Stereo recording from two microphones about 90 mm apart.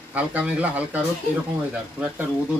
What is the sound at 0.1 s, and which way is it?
Speech, 15° right (ahead or behind).